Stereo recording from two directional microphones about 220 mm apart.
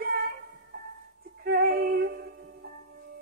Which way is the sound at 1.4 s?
45° right (ahead or behind).